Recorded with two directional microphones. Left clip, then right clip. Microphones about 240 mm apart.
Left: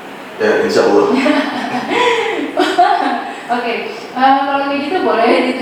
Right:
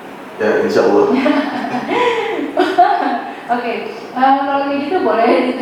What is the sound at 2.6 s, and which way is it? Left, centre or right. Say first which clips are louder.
Chuckle: even; centre.